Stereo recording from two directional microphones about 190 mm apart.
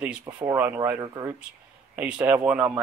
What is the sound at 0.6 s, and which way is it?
Speech, 10° right (ahead or behind).